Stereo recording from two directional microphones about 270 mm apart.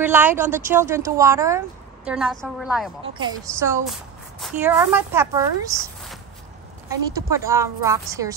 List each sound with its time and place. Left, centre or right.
0.0 s a woman's voice: centre
6.9 s a woman's voice: centre